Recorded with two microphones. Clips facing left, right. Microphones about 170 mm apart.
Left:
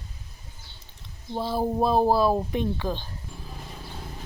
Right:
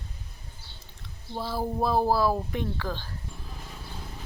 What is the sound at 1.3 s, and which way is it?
Speech, 20° left (ahead or behind).